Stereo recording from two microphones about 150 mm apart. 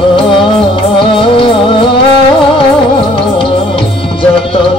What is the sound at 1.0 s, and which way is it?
Music, 35° left (ahead or behind).